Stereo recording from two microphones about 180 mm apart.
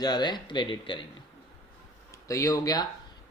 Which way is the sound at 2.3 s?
15° left (ahead or behind).